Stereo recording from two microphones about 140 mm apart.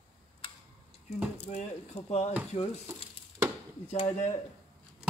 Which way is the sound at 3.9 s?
55° left (ahead or behind).